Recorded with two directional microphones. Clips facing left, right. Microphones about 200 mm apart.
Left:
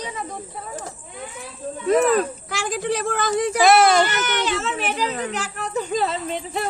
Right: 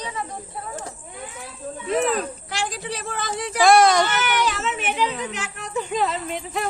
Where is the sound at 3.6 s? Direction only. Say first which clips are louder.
Right 1 dB; 25° left (ahead or behind).